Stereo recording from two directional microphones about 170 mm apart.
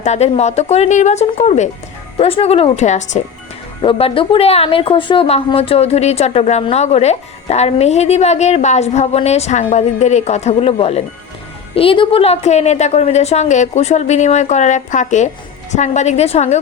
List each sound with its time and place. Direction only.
0.0 s a woman's voice: 40° left (ahead or behind)